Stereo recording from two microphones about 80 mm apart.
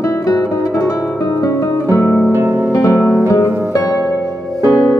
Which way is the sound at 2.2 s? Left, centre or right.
Right.